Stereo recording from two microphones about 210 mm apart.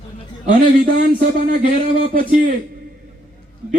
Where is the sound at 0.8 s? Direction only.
45° right (ahead or behind).